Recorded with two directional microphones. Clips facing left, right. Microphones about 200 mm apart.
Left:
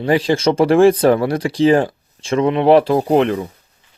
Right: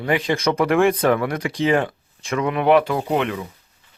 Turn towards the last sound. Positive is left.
turn(degrees=35)  # may be behind; listen again after turning